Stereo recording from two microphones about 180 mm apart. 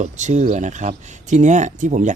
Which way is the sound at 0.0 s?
40° right (ahead or behind).